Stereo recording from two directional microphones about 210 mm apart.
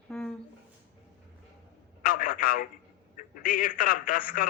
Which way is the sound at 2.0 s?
45° left (ahead or behind).